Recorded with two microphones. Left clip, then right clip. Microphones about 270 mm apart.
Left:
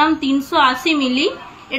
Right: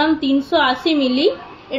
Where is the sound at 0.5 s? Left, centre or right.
Left.